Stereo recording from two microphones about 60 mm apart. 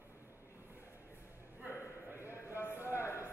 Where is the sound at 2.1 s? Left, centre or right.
Right.